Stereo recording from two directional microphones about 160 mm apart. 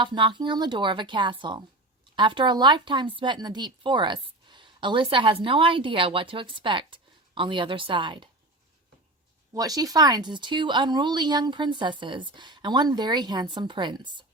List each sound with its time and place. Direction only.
0.0 s a woman's voice: 30° right (ahead or behind)
9.6 s a woman's voice: 20° right (ahead or behind)